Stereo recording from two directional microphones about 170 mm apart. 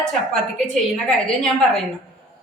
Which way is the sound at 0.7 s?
Centre (ahead or behind).